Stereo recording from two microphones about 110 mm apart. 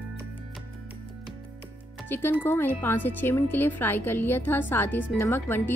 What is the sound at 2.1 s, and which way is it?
Speech, 20° left (ahead or behind).